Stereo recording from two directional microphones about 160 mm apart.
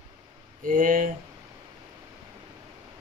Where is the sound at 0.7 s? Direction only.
55° right (ahead or behind).